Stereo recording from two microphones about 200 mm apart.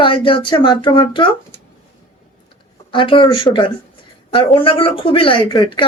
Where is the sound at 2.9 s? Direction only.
25° left (ahead or behind).